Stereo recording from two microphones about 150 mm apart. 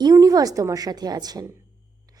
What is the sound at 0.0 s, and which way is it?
A woman's voice, 25° right (ahead or behind).